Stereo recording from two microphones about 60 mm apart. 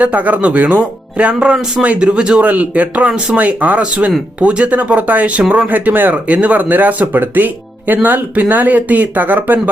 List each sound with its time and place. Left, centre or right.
0.0 s speech: right
3.1 s speech: centre
3.3 s speech: right